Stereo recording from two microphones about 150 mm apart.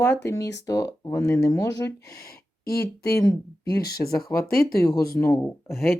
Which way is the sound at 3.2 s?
25° left (ahead or behind).